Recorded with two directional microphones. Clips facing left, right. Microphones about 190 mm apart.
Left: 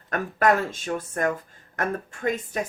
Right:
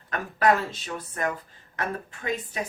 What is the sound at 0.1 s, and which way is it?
Speech, 50° left (ahead or behind).